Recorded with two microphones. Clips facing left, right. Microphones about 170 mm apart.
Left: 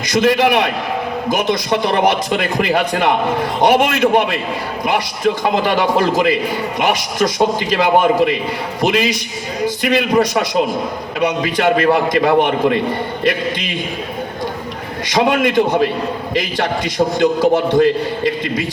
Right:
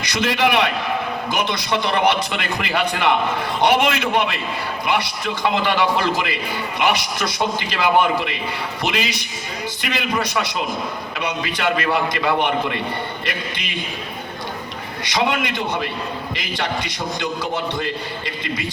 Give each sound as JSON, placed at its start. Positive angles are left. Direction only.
{"t": 0.0, "sound": "a man's voice", "side_deg": 45}
{"t": 15.0, "sound": "a man's voice", "side_deg": 50}